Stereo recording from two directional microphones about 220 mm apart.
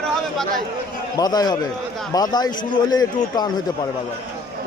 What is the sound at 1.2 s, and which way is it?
A man's voice, 15° left (ahead or behind).